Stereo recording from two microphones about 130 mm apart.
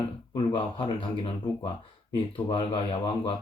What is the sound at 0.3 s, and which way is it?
Speech, 45° left (ahead or behind).